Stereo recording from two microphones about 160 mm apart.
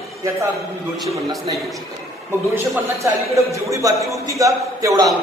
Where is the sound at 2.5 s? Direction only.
20° right (ahead or behind).